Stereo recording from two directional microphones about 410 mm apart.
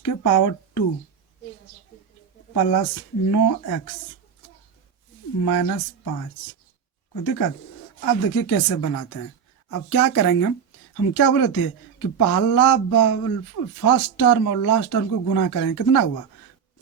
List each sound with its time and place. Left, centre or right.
0.0 s speech: left
2.5 s speech: left
5.5 s speech: left
7.1 s speech: left